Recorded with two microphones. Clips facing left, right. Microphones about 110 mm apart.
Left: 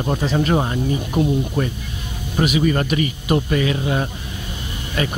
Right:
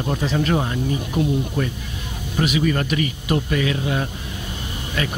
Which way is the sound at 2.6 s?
25° left (ahead or behind).